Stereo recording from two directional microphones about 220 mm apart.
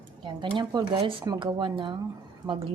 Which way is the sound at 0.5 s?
20° right (ahead or behind).